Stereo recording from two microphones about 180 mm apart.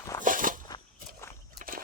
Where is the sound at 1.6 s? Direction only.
45° right (ahead or behind).